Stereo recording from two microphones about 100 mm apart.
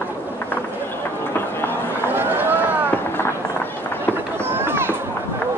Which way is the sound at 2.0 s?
20° right (ahead or behind).